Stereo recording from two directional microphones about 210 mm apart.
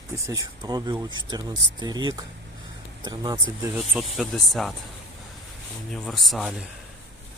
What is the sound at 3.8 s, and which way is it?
Speech, centre (ahead or behind).